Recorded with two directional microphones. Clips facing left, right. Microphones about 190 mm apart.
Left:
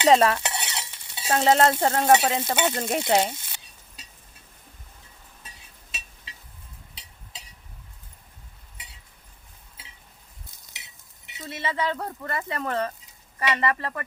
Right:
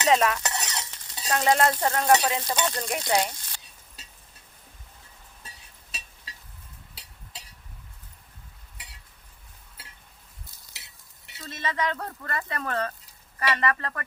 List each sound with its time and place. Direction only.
0.0 s stir: 30° left (ahead or behind)
10.6 s stir: 20° left (ahead or behind)
11.3 s speech: 20° left (ahead or behind)
13.4 s stir: 20° left (ahead or behind)